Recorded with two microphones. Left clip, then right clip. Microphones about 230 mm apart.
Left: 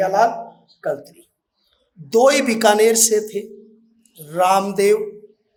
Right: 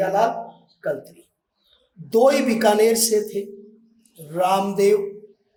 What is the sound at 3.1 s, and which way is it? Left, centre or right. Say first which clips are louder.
A man's voice: left 1 dB; centre.